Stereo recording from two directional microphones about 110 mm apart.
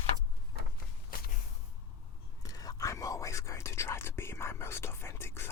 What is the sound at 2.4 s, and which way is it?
Whispering, 35° left (ahead or behind).